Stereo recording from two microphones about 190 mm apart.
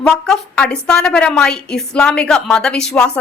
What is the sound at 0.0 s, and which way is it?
Speech, 5° left (ahead or behind).